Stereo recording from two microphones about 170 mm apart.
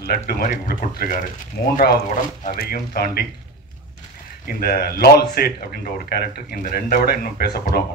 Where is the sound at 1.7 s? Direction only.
65° left (ahead or behind).